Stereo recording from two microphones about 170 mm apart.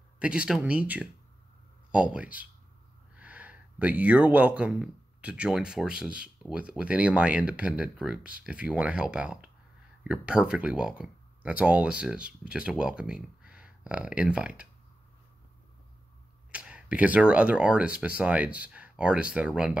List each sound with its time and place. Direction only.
0.2 s speech: 5° right (ahead or behind)
16.5 s speech: 5° right (ahead or behind)